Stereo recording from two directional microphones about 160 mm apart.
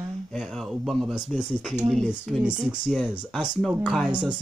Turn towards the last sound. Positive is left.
turn(degrees=-5)  # may be behind; listen again after turning